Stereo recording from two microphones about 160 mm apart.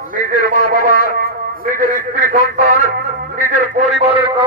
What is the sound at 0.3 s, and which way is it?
Speech, 75° left (ahead or behind).